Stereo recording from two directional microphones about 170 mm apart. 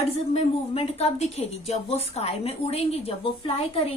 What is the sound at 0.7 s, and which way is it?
Speech, 35° left (ahead or behind).